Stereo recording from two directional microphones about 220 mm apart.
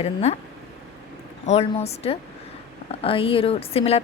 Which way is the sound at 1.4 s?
30° left (ahead or behind).